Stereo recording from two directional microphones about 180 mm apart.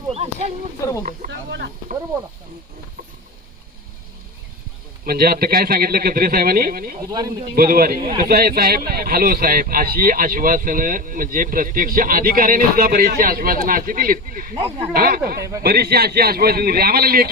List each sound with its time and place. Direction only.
0.1 s a sound: 35° right (ahead or behind)
0.8 s wild animals: 15° left (ahead or behind)
1.3 s wild animals: 75° right (ahead or behind)
5.0 s speech: 55° right (ahead or behind)
7.0 s speech: 25° right (ahead or behind)
7.5 s speech: 55° right (ahead or behind)
15.4 s speech: 20° right (ahead or behind)
15.6 s speech: 60° right (ahead or behind)